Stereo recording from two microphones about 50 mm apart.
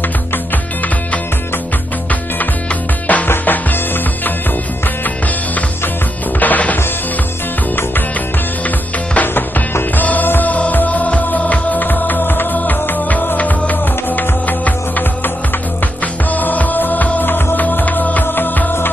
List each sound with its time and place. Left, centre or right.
2.0 s music: left
3.3 s music: left
6.4 s music: left
8.6 s music: left
9.3 s music: left